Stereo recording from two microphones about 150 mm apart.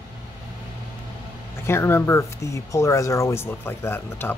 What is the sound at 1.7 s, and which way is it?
Speech, 15° left (ahead or behind).